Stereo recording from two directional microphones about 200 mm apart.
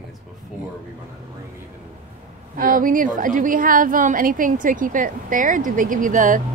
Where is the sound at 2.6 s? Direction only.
45° right (ahead or behind).